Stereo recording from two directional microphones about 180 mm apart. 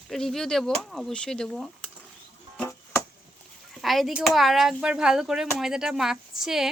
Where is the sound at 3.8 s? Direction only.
Centre (ahead or behind).